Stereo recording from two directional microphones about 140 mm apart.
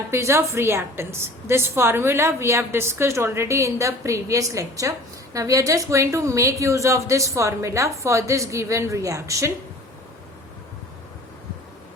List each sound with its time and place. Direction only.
0.1 s a woman's voice: 20° right (ahead or behind)